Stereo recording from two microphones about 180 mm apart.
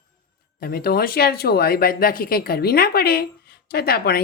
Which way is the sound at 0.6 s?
55° left (ahead or behind).